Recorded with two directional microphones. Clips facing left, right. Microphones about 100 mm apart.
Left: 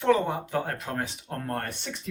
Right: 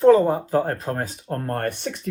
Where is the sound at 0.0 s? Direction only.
35° right (ahead or behind).